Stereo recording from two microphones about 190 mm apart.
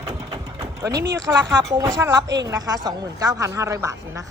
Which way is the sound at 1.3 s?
10° right (ahead or behind).